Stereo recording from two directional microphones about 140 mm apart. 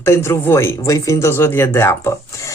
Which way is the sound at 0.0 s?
20° left (ahead or behind).